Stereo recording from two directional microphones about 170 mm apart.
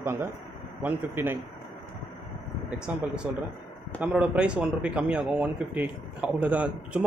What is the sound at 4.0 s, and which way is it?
A man's voice, 5° right (ahead or behind).